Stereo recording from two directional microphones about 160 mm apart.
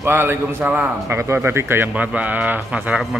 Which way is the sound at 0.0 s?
15° right (ahead or behind).